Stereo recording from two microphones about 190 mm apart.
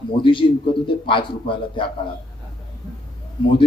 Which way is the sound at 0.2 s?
25° left (ahead or behind).